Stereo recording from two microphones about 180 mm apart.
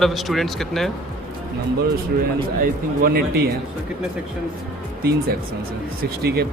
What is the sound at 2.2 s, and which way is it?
A man's voice, 50° right (ahead or behind).